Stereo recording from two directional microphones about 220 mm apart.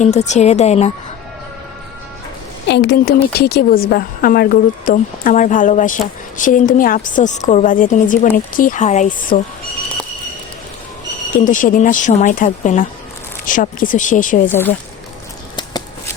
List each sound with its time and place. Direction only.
0.0 s speech: 30° left (ahead or behind)
2.6 s speech: 50° left (ahead or behind)
11.3 s speech: 35° left (ahead or behind)
15.5 s a sound: 20° left (ahead or behind)